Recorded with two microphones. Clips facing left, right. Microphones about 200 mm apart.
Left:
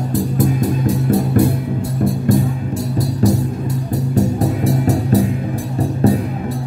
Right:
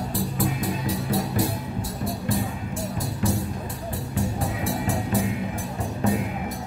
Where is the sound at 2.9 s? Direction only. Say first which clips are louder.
Left 11 dB; 40° left (ahead or behind).